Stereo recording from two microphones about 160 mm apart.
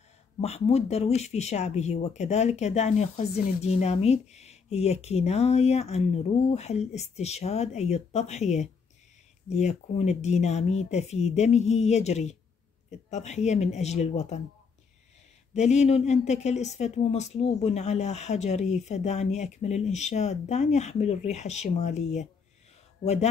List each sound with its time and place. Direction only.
0.4 s speech: 40° left (ahead or behind)
15.5 s speech: 45° left (ahead or behind)